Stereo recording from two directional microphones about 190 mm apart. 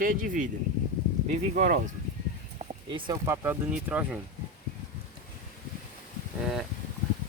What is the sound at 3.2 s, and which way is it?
Speech, 15° right (ahead or behind).